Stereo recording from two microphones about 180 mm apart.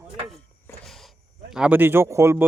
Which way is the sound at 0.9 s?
Centre (ahead or behind).